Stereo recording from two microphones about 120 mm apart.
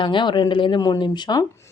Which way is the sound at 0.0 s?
40° left (ahead or behind).